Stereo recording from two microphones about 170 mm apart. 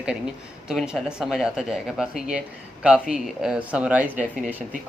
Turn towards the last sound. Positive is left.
turn(degrees=-10)  # may be behind; listen again after turning